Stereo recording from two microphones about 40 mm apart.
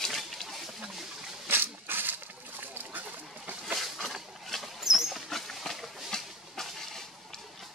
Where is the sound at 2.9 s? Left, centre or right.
Right.